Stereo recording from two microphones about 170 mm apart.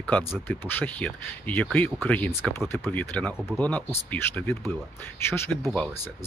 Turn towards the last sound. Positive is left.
turn(degrees=5)  # may be behind; listen again after turning